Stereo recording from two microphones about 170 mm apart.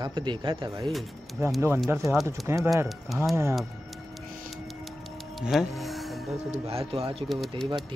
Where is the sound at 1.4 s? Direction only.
15° right (ahead or behind).